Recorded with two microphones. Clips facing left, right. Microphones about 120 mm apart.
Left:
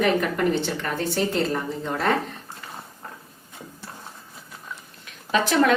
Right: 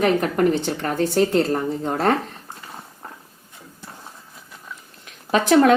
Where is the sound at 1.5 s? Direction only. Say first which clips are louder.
Right 4 dB; 40° right (ahead or behind).